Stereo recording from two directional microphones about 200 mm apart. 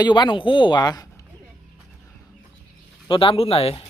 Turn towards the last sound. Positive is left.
turn(degrees=30)  # may be behind; listen again after turning